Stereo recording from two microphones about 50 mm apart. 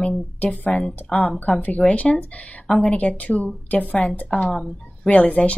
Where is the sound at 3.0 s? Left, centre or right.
Left.